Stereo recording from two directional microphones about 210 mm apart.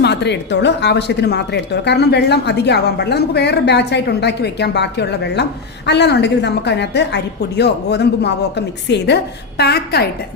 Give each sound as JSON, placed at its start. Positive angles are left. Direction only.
{"t": 0.0, "sound": "a woman's voice", "side_deg": 55}